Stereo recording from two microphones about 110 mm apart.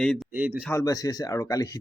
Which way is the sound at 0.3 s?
15° right (ahead or behind).